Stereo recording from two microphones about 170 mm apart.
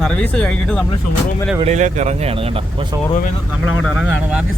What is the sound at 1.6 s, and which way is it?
Speech, 45° right (ahead or behind).